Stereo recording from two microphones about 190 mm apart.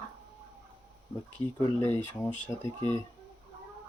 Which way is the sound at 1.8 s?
10° left (ahead or behind).